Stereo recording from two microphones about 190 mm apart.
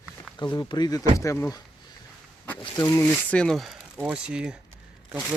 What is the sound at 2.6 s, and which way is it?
Speech, 20° left (ahead or behind).